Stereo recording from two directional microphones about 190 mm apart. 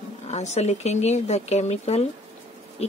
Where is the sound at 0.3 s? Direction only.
35° left (ahead or behind).